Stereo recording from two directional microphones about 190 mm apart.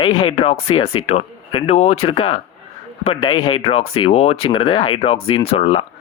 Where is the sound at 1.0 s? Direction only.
30° left (ahead or behind).